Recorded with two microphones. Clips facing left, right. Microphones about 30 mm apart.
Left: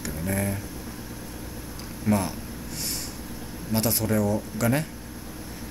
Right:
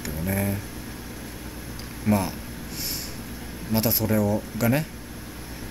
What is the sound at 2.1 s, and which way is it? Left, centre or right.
Speech, right.